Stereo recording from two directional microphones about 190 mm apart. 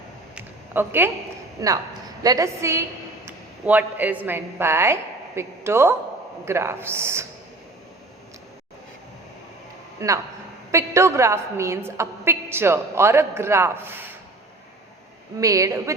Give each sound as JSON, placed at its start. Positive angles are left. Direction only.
{"t": 0.3, "sound": "a sound", "side_deg": -10}
{"t": 2.2, "sound": "a woman's voice", "side_deg": -15}
{"t": 10.0, "sound": "a woman's voice", "side_deg": -15}
{"t": 15.4, "sound": "a woman's voice", "side_deg": -15}